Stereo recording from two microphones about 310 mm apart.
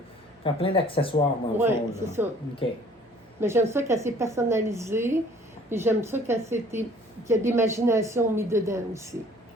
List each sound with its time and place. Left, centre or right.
0.4 s speech: centre
1.5 s speech: centre
3.4 s speech: centre